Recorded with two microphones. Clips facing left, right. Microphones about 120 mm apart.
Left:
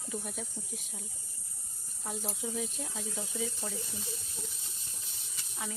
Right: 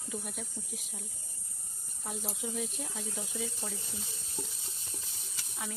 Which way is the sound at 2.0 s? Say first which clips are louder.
Left 1 dB; 5° right (ahead or behind).